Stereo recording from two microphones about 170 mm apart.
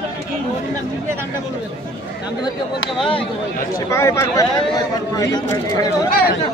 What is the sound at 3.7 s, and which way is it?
Speech, 15° left (ahead or behind).